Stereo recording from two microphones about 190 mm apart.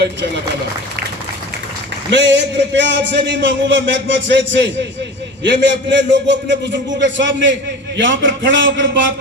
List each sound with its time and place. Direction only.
2.1 s a man's voice: 70° right (ahead or behind)